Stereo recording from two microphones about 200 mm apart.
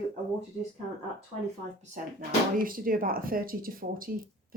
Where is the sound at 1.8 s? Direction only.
40° right (ahead or behind).